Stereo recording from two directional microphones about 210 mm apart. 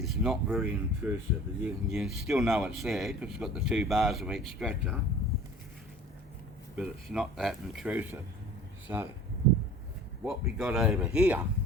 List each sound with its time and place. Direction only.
0.0 s speech: centre (ahead or behind)
6.7 s speech: 5° right (ahead or behind)
10.4 s speech: 5° right (ahead or behind)